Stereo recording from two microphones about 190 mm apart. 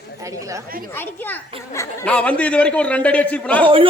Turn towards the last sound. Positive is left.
turn(degrees=-30)  # may be behind; listen again after turning